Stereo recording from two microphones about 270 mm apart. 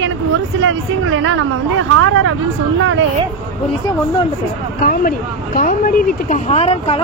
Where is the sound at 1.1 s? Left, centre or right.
Right.